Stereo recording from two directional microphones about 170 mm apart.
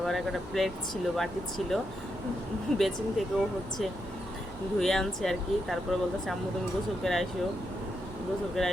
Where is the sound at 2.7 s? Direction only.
Centre (ahead or behind).